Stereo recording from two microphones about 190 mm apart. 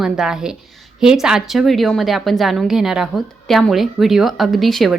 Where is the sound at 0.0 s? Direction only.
5° right (ahead or behind).